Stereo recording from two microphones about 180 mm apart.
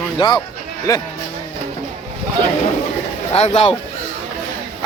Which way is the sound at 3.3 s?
35° left (ahead or behind).